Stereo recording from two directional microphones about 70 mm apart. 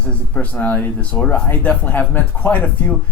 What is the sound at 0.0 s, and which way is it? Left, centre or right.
Speech, centre.